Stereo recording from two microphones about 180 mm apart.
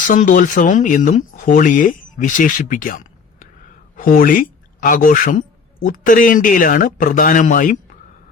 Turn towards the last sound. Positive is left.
turn(degrees=45)  # may be behind; listen again after turning